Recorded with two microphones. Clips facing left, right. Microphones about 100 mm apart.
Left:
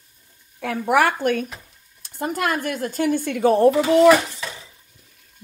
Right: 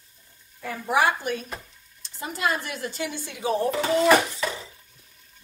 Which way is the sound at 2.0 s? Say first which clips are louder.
Left 4 dB; 55° left (ahead or behind).